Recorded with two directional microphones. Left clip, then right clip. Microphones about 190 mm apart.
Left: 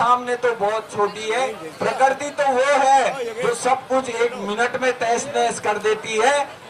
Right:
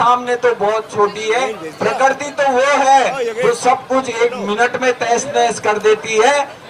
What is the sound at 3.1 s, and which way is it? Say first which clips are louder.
Speech: right 6 dB; 35° right (ahead or behind).